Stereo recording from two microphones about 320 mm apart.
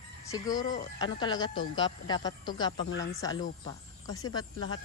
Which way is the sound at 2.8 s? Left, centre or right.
Left.